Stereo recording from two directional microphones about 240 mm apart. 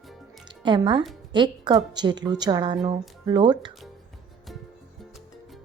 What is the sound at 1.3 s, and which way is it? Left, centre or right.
A woman's voice, centre.